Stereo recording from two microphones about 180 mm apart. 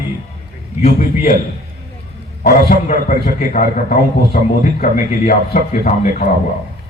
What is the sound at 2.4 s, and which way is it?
Speech, 60° left (ahead or behind).